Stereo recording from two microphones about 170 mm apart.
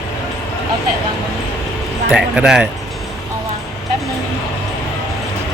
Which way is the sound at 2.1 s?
5° right (ahead or behind).